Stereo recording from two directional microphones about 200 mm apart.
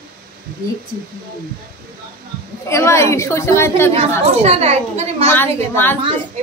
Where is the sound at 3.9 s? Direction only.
30° right (ahead or behind).